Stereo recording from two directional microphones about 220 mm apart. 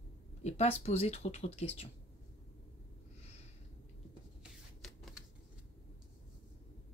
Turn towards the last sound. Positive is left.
turn(degrees=0)  # may be behind; listen again after turning